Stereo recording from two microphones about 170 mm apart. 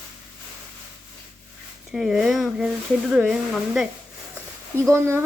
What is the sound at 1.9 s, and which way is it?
Speech, 5° right (ahead or behind).